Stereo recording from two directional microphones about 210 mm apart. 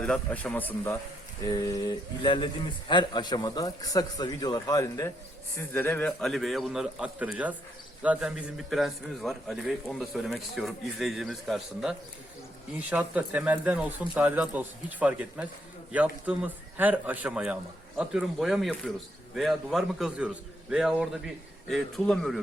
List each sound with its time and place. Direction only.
0.0 s a man's voice: 5° left (ahead or behind)